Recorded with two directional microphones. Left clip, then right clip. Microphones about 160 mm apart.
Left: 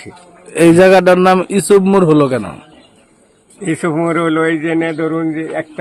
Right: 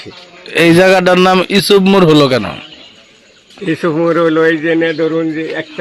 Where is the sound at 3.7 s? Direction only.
25° left (ahead or behind).